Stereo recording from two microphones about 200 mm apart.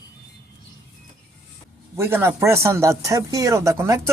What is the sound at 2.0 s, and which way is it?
Speech, 10° right (ahead or behind).